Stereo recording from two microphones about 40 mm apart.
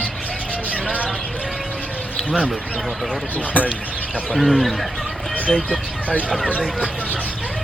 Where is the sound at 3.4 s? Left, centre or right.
Left.